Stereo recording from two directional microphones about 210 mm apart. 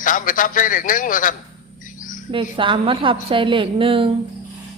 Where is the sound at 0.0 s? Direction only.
40° left (ahead or behind).